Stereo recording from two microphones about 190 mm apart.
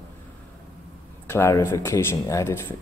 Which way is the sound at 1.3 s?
15° left (ahead or behind).